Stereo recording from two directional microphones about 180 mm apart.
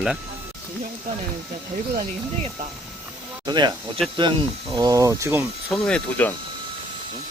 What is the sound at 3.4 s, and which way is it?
Speech, 25° right (ahead or behind).